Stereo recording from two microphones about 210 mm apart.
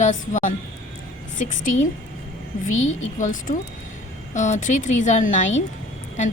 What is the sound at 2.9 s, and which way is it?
A woman's voice, 35° left (ahead or behind).